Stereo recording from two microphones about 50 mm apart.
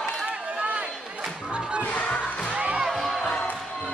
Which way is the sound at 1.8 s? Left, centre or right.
Left.